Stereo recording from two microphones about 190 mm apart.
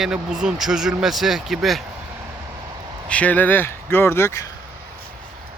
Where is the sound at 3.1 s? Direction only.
5° left (ahead or behind).